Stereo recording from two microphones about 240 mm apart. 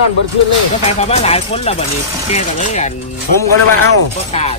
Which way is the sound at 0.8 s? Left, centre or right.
Left.